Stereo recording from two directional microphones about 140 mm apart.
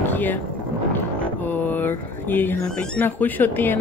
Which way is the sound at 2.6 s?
5° left (ahead or behind).